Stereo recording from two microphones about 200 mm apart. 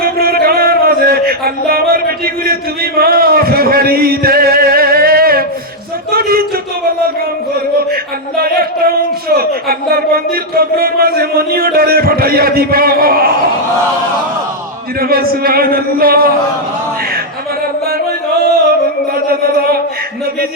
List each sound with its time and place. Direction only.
0.0 s music: 50° right (ahead or behind)
6.1 s a sound: 50° right (ahead or behind)
8.4 s speech: 50° right (ahead or behind)
15.0 s speech: 50° right (ahead or behind)
19.1 s music: 50° right (ahead or behind)